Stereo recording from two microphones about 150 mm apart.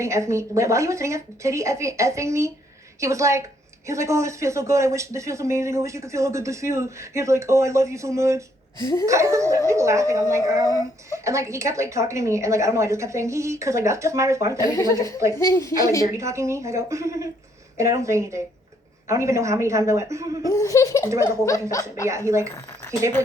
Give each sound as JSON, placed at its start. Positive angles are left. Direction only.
{"t": 0.0, "sound": "speech", "side_deg": -20}
{"t": 8.8, "sound": "laughter", "side_deg": 20}
{"t": 9.0, "sound": "speech", "side_deg": -20}
{"t": 14.7, "sound": "laughter", "side_deg": 20}
{"t": 16.1, "sound": "speech", "side_deg": -20}
{"t": 20.5, "sound": "laughter", "side_deg": 20}
{"t": 22.0, "sound": "speech", "side_deg": -20}